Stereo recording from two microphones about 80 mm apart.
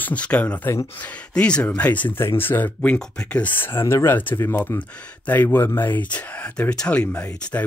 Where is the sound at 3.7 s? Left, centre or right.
Left; by 7.3 s centre.